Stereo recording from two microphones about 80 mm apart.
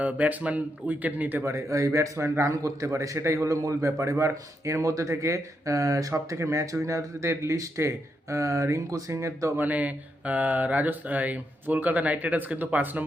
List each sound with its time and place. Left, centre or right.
0.0 s speech: centre
1.5 s a man's voice: right
9.6 s speech: right